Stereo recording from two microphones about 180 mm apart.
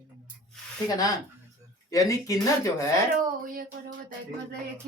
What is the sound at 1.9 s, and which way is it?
Speech, 20° left (ahead or behind).